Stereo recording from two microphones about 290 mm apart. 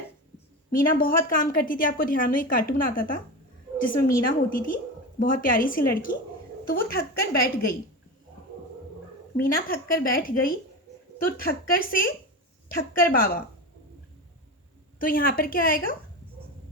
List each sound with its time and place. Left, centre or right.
0.3 s a woman's voice: left
9.4 s a woman's voice: left
14.9 s a woman's voice: left